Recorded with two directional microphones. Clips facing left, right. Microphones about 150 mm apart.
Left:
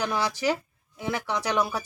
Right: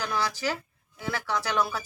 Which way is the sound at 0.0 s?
20° left (ahead or behind).